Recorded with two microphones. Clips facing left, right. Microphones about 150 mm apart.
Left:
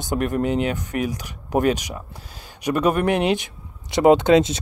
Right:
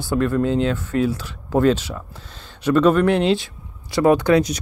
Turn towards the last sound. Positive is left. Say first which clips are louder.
# left 1 dB
turn(degrees=25)  # may be behind; listen again after turning